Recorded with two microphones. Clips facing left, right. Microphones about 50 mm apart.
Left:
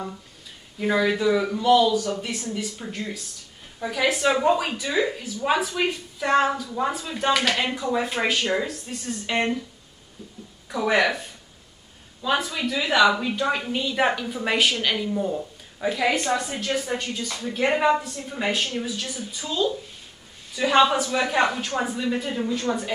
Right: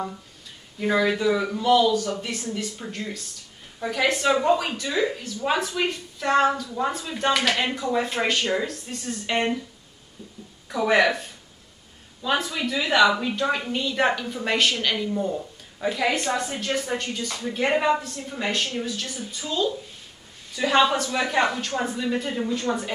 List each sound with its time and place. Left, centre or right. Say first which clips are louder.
0.7 s a woman's voice: even; centre
10.7 s a woman's voice: right 1 dB; centre